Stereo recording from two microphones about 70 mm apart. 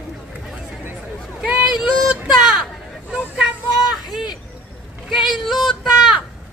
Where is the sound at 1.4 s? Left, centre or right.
Centre.